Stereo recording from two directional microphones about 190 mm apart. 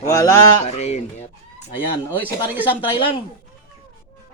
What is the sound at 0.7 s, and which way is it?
Speech, 35° left (ahead or behind).